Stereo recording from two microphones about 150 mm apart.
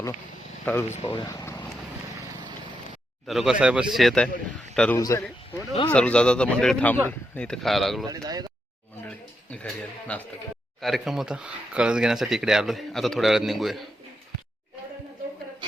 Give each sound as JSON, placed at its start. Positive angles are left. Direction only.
{"t": 0.6, "sound": "speech", "side_deg": 15}
{"t": 1.0, "sound": "speech", "side_deg": 30}
{"t": 3.2, "sound": "a man's voice", "side_deg": 0}
{"t": 4.9, "sound": "a man's voice", "side_deg": 20}
{"t": 5.9, "sound": "speech", "side_deg": 5}
{"t": 8.0, "sound": "speech", "side_deg": -25}
{"t": 10.1, "sound": "speech", "side_deg": 10}